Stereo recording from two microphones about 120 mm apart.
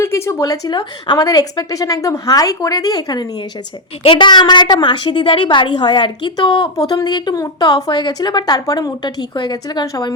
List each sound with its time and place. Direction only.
0.0 s speech: 20° left (ahead or behind)